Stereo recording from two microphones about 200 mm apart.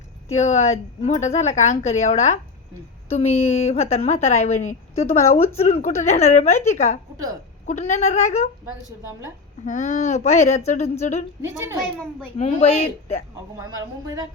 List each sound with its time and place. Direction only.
0.3 s a woman's voice: 35° left (ahead or behind)
9.6 s a woman's voice: 40° left (ahead or behind)
12.4 s a woman's voice: 35° left (ahead or behind)
13.7 s a woman's voice: 15° right (ahead or behind)